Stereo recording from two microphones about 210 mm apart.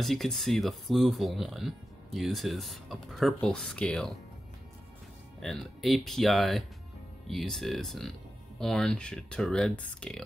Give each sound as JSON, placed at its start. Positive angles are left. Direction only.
{"t": 0.0, "sound": "speech", "side_deg": 0}
{"t": 5.4, "sound": "speech", "side_deg": 0}